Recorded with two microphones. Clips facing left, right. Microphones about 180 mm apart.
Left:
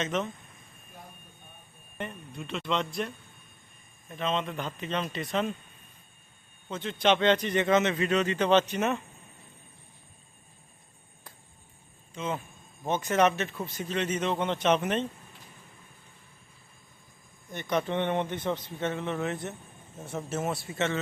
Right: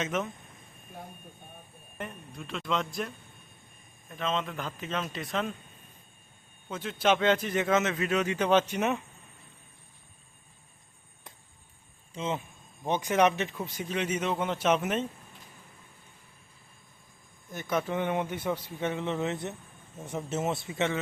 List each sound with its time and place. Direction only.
0.0 s speech: 5° right (ahead or behind)
2.0 s speech: centre (ahead or behind)
4.1 s speech: centre (ahead or behind)
6.7 s speech: 5° right (ahead or behind)
12.1 s speech: 25° right (ahead or behind)
12.8 s speech: 15° right (ahead or behind)
17.5 s speech: 5° right (ahead or behind)